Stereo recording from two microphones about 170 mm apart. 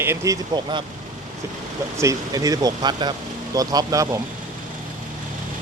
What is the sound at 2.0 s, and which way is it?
Speech, 20° right (ahead or behind).